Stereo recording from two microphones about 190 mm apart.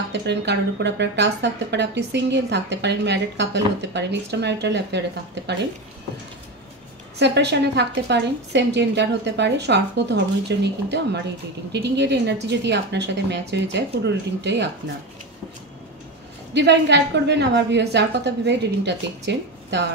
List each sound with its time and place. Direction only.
0.1 s speech: 65° right (ahead or behind)
7.2 s speech: 65° right (ahead or behind)
16.5 s speech: 65° right (ahead or behind)